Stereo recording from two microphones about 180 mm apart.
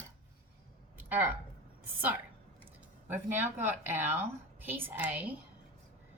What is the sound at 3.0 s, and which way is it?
A woman's voice, 10° right (ahead or behind).